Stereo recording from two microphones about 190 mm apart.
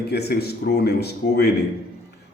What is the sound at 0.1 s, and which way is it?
A man's voice, 55° left (ahead or behind).